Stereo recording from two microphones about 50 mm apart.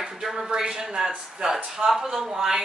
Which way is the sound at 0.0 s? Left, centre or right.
Centre.